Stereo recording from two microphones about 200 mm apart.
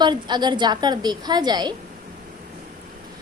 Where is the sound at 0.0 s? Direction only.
20° right (ahead or behind).